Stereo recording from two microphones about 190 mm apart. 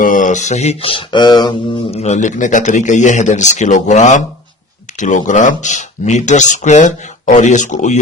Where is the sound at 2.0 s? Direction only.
40° left (ahead or behind).